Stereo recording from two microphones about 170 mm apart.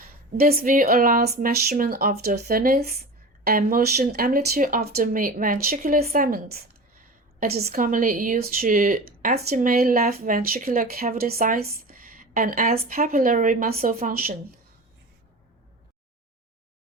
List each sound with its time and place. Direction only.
0.3 s speech: 60° right (ahead or behind)